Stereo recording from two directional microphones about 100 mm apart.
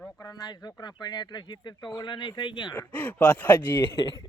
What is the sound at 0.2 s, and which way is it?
Speech, 40° left (ahead or behind).